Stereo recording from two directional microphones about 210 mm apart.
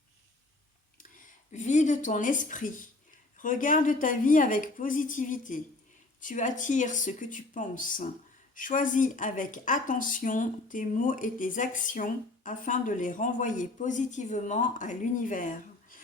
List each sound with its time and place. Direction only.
0.9 s speech: 40° left (ahead or behind)